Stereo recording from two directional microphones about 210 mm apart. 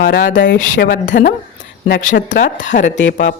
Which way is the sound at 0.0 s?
40° left (ahead or behind).